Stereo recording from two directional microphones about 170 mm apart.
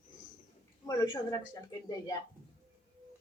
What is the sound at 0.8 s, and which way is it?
Speech, 25° left (ahead or behind).